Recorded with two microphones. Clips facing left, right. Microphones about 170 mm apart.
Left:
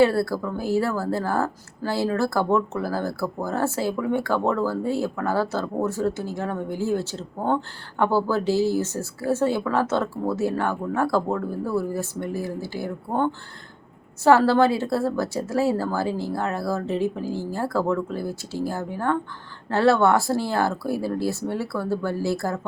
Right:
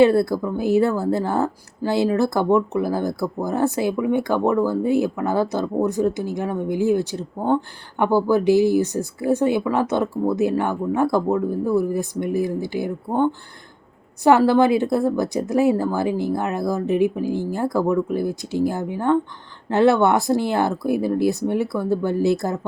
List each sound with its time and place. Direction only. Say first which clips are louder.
0.0 s a woman's voice: right 4 dB; 20° right (ahead or behind)